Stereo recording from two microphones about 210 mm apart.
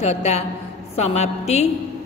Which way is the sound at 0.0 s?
30° left (ahead or behind).